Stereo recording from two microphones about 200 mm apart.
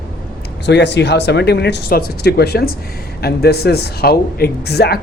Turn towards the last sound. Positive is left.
turn(degrees=55)  # may be behind; listen again after turning